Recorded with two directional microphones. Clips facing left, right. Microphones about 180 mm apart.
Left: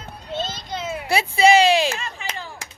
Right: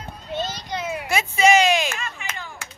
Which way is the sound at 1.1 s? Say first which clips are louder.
Left 2 dB; 35° left (ahead or behind).